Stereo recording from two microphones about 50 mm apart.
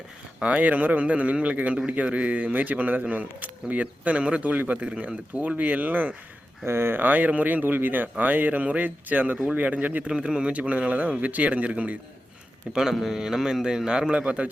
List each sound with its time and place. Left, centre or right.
0.3 s a man's voice: right
6.7 s speech: right
10.3 s a man's voice: right
12.7 s a man's voice: centre
14.1 s a man's voice: right